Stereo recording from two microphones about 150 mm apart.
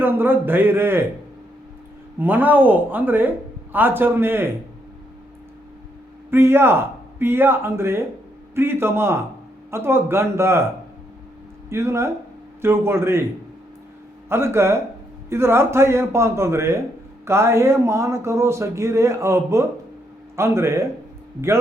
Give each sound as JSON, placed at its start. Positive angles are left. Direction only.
{"t": 0.0, "sound": "speech", "side_deg": -15}
{"t": 2.1, "sound": "speech", "side_deg": -10}
{"t": 6.3, "sound": "speech", "side_deg": -15}
{"t": 11.7, "sound": "speech", "side_deg": -20}
{"t": 14.3, "sound": "speech", "side_deg": -15}